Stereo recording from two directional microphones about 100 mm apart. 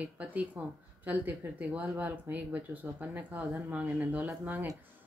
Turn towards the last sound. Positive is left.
turn(degrees=-20)  # may be behind; listen again after turning